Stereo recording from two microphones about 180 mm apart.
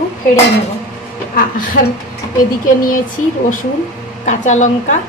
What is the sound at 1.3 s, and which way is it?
Speech, 50° left (ahead or behind).